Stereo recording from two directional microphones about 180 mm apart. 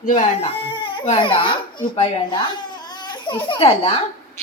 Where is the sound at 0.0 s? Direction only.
45° left (ahead or behind).